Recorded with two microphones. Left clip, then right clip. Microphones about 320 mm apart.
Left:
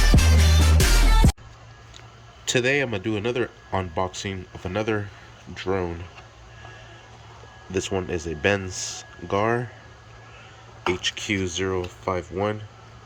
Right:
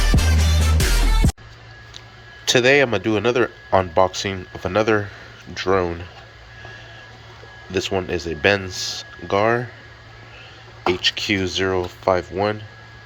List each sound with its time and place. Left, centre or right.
0.1 s music: centre
2.4 s speech: centre
7.7 s speech: centre
10.9 s speech: centre